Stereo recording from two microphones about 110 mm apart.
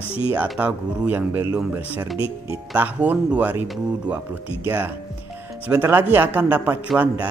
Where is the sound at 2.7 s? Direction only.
15° right (ahead or behind).